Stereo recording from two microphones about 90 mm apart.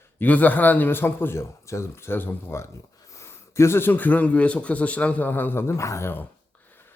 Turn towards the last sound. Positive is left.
turn(degrees=25)  # may be behind; listen again after turning